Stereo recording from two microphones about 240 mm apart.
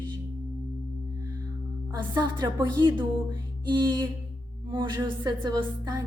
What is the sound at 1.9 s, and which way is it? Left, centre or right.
A woman's voice, centre.